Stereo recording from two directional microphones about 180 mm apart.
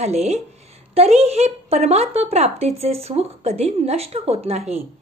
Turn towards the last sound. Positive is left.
turn(degrees=-35)  # may be behind; listen again after turning